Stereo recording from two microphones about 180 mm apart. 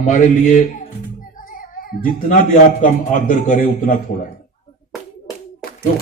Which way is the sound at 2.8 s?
45° left (ahead or behind).